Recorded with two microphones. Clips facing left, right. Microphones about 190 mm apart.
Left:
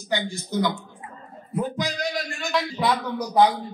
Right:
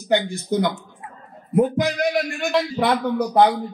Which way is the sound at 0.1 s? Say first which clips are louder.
Right 6 dB; 55° right (ahead or behind).